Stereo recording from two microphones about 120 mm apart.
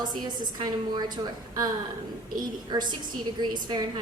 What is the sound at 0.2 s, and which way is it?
A woman's voice, 35° right (ahead or behind).